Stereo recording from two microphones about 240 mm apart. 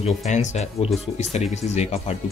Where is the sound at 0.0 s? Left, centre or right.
Left.